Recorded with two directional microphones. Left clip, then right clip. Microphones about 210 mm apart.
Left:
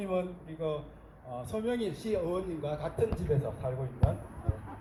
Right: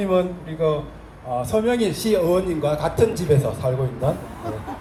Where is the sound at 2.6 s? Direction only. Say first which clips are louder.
Right 13 dB; 35° right (ahead or behind).